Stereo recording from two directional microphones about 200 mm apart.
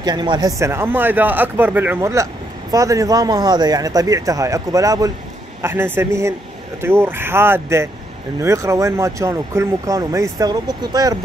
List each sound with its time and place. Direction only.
0.0 s speech: 20° right (ahead or behind)